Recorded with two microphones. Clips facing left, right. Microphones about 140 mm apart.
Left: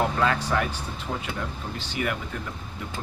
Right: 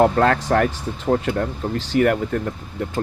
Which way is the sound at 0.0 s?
55° right (ahead or behind).